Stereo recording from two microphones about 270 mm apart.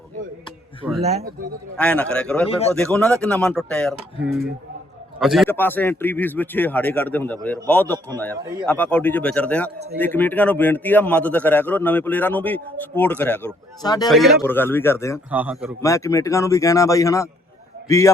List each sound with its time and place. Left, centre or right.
1.7 s speech: centre
2.5 s speech: left
2.7 s speech: centre
5.2 s a man's voice: centre
14.1 s a man's voice: centre
15.3 s speech: centre
15.8 s a man's voice: centre